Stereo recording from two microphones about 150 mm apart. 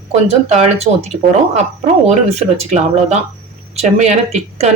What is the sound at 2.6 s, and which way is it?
Speech, 50° right (ahead or behind).